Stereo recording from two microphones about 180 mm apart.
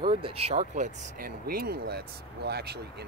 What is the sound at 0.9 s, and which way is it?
Speech, 55° right (ahead or behind).